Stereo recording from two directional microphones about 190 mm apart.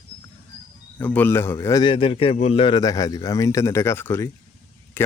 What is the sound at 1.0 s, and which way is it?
Speech, 10° left (ahead or behind).